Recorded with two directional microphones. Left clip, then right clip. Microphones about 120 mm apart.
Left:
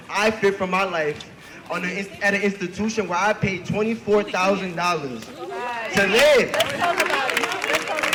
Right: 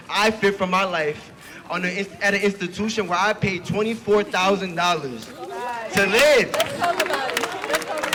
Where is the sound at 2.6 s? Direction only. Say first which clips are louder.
Right 1 dB; 90° right.